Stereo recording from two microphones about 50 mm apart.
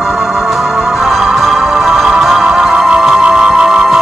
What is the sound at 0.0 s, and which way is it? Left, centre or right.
Music, centre.